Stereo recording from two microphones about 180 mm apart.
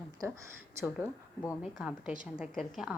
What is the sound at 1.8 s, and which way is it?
A woman's voice, 5° right (ahead or behind).